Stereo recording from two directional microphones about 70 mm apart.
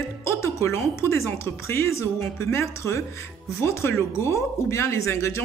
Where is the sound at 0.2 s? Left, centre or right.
Left.